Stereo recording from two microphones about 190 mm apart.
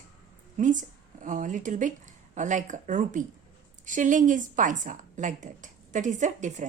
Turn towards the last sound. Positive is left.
turn(degrees=-40)  # may be behind; listen again after turning